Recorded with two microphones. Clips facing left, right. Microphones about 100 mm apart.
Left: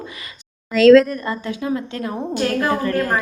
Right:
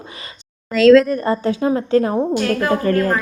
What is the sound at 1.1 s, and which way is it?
A woman's voice, 35° right (ahead or behind).